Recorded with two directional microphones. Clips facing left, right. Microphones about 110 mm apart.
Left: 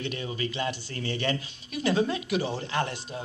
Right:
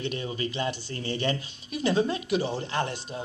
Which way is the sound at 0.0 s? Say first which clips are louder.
Right 1 dB; 30° right (ahead or behind).